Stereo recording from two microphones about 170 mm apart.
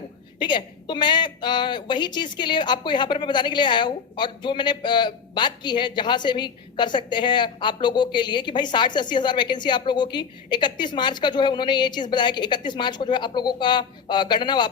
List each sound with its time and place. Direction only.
0.3 s a woman's voice: 25° left (ahead or behind)